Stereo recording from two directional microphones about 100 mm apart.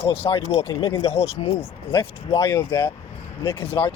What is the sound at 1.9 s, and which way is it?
Speech, 50° left (ahead or behind).